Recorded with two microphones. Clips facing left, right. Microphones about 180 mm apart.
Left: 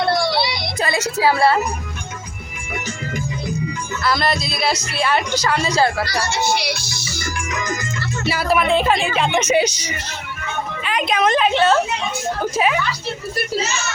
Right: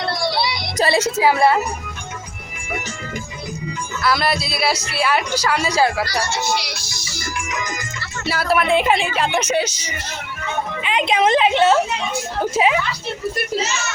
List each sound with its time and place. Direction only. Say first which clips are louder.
0.8 s a woman's voice: right 3 dB; 30° right (ahead or behind)
4.0 s speech: even; 10° right (ahead or behind)
8.3 s speech: even; centre (ahead or behind)
8.7 s speech: right 2 dB; 15° right (ahead or behind)
9.1 s speech: left 1 dB; centre (ahead or behind)
9.5 s speech: left 3 dB; 15° left (ahead or behind)
10.8 s a woman's voice: right 1 dB; 25° right (ahead or behind)